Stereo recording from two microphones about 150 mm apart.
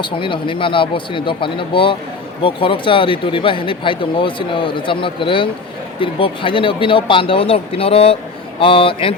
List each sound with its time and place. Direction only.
0.0 s speech: 35° left (ahead or behind)